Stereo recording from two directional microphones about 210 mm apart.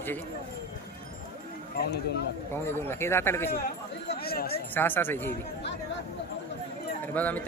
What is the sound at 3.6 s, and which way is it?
Speech, 45° left (ahead or behind).